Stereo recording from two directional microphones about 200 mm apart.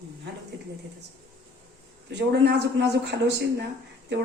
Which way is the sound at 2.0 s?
60° right (ahead or behind).